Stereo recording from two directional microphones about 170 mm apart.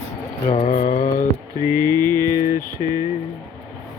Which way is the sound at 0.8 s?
50° left (ahead or behind).